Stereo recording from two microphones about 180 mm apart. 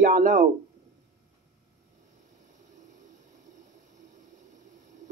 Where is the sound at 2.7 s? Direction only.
45° right (ahead or behind).